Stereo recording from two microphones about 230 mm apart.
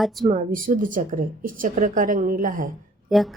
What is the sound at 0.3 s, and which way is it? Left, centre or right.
A woman's voice, right.